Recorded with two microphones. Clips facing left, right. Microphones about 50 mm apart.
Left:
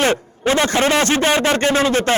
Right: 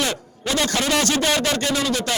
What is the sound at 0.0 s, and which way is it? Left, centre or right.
A man's voice, left.